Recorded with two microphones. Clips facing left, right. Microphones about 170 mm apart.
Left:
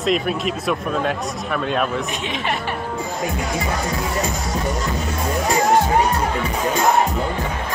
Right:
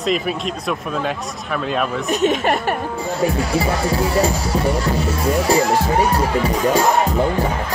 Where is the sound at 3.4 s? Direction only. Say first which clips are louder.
Right 4 dB; 30° right (ahead or behind).